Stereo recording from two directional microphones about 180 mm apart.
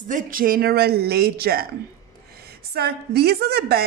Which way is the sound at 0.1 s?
50° right (ahead or behind).